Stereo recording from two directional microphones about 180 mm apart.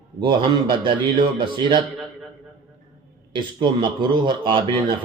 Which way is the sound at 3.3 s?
25° right (ahead or behind).